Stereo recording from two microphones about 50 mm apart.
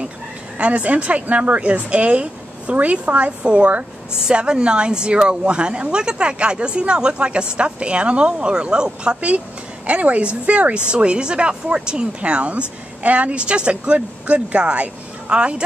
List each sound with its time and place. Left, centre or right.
0.6 s a woman's voice: right